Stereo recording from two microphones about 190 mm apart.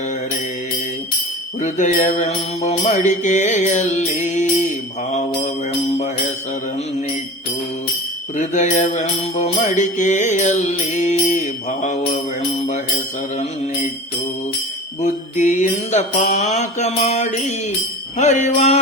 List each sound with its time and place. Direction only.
1.6 s music: 40° left (ahead or behind)
8.4 s music: 40° left (ahead or behind)
15.0 s music: 40° left (ahead or behind)